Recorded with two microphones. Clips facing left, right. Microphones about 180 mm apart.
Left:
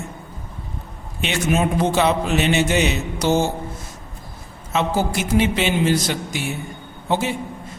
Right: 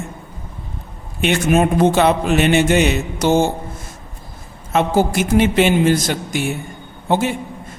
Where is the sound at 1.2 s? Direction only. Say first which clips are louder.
Right 5 dB; 55° right (ahead or behind).